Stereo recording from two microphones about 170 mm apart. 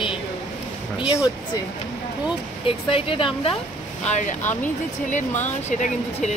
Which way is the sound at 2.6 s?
30° left (ahead or behind).